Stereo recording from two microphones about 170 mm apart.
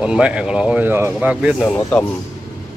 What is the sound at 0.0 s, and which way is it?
Speech, 5° right (ahead or behind).